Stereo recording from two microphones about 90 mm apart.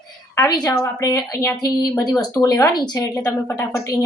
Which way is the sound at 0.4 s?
45° left (ahead or behind).